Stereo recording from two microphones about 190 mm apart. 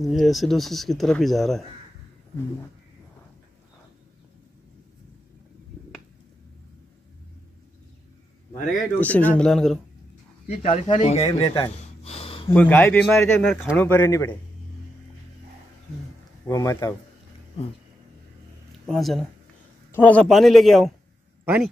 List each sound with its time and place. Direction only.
0.0 s speech: centre (ahead or behind)
8.9 s speech: 10° left (ahead or behind)
10.5 s speech: 35° left (ahead or behind)
11.3 s a sound: 25° left (ahead or behind)
12.4 s speech: 10° left (ahead or behind)
13.7 s speech: 10° left (ahead or behind)
16.4 s speech: 20° left (ahead or behind)
18.9 s speech: centre (ahead or behind)